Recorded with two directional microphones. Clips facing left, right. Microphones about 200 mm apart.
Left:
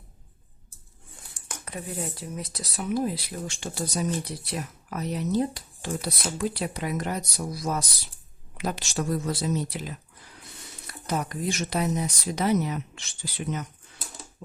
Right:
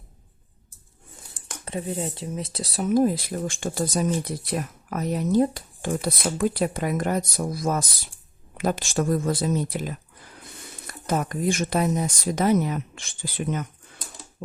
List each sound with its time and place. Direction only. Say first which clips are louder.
1.3 s speech: right 6 dB; 30° right (ahead or behind)
2.8 s speech: right 7 dB; 45° right (ahead or behind)